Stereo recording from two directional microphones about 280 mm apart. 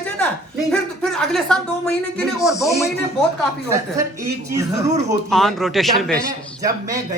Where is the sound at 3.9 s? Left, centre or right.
Centre.